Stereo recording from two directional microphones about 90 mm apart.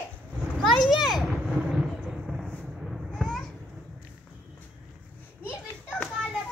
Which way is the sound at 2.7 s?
Centre (ahead or behind).